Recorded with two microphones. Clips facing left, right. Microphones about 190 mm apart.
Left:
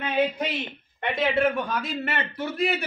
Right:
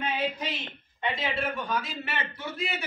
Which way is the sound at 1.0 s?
60° left (ahead or behind).